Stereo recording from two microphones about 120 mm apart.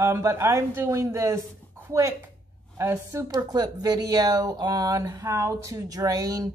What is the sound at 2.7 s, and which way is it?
A woman's voice, 25° right (ahead or behind).